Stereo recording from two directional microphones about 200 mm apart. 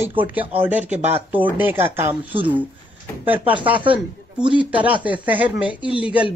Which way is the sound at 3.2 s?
10° right (ahead or behind).